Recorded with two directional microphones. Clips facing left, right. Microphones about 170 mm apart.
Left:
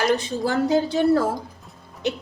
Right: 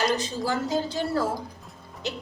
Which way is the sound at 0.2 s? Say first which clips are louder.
Left 5 dB; 65° left (ahead or behind).